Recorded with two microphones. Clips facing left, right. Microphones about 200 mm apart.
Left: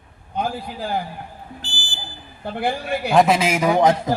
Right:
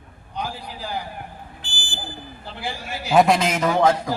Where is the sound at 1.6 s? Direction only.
55° right (ahead or behind).